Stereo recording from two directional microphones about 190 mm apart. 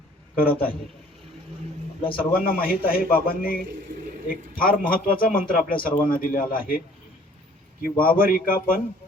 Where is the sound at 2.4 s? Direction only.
50° left (ahead or behind).